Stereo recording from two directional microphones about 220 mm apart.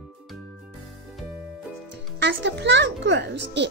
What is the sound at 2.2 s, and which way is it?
Speech, 55° right (ahead or behind).